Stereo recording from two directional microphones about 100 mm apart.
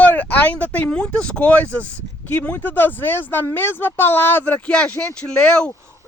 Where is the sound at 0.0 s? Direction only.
15° left (ahead or behind).